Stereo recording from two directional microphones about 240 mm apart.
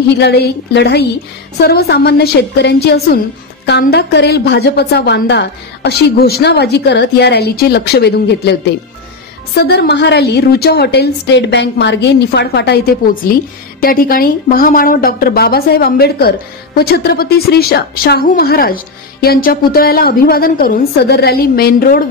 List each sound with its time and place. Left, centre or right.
0.2 s a woman's voice: left